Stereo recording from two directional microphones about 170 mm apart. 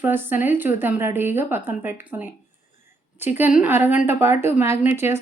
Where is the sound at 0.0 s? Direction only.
10° right (ahead or behind).